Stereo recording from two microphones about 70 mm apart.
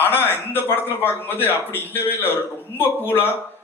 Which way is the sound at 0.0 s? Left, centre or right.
Left.